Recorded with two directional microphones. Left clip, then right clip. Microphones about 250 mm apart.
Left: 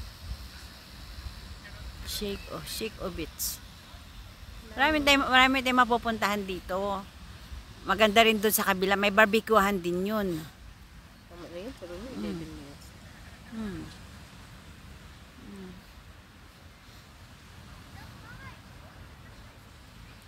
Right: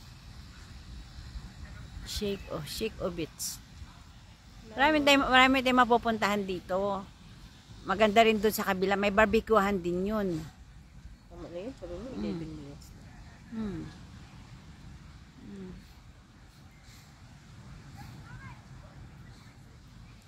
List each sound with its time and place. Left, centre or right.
2.0 s speech: centre
4.7 s speech: centre